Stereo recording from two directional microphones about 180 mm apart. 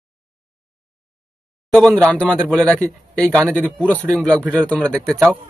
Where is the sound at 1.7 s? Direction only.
5° left (ahead or behind).